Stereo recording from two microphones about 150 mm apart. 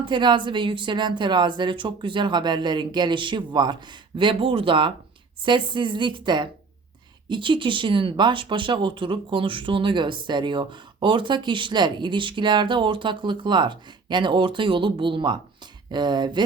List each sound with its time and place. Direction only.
0.0 s speech: 30° right (ahead or behind)